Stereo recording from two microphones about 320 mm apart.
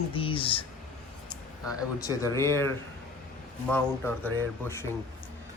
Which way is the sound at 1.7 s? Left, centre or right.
Centre.